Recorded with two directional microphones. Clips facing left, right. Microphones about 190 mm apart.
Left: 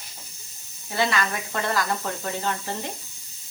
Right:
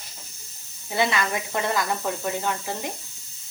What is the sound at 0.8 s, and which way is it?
Speech, 15° right (ahead or behind).